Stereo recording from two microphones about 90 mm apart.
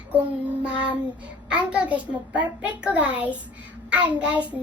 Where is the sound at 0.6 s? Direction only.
15° right (ahead or behind).